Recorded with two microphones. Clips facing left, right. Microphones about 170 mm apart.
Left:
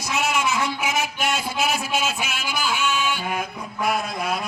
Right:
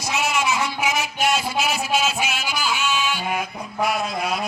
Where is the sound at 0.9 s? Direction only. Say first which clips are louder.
Right 2 dB; 50° left (ahead or behind).